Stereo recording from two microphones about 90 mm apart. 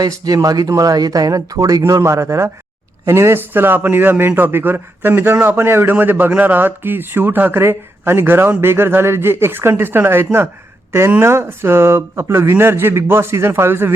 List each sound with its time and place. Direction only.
0.0 s a man's voice: 40° right (ahead or behind); by 13.9 s 25° right (ahead or behind)